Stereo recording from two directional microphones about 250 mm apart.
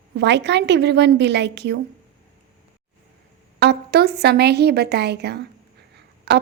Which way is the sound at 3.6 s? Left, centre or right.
Right.